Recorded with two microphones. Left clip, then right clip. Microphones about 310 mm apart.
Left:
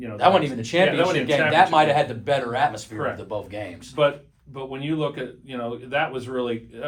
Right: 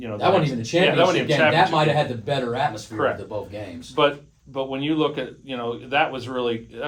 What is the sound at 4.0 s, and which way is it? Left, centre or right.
Speech, centre.